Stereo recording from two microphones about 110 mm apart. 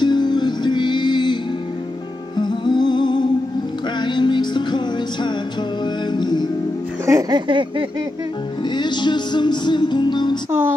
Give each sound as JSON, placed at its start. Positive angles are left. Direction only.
{"t": 0.0, "sound": "music", "side_deg": 40}
{"t": 7.1, "sound": "music", "side_deg": -30}
{"t": 7.3, "sound": "a sound", "side_deg": -50}
{"t": 8.6, "sound": "music", "side_deg": 45}